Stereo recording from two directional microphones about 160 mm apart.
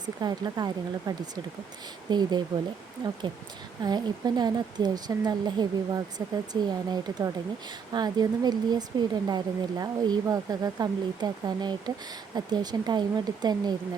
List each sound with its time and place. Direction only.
0.0 s speech: 25° right (ahead or behind)
3.8 s speech: 25° right (ahead or behind)